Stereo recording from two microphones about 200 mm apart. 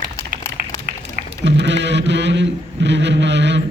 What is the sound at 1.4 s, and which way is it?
A man's voice, 60° right (ahead or behind).